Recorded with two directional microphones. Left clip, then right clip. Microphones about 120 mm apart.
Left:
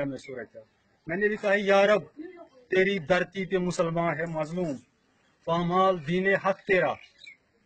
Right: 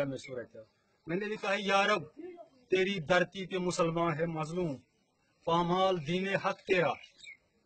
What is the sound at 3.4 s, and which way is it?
Speech, 30° right (ahead or behind).